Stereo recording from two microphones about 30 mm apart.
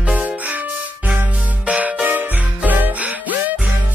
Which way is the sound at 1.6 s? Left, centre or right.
Right.